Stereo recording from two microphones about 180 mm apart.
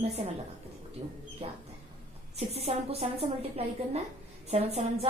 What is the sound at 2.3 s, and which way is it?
A woman's voice, 35° right (ahead or behind).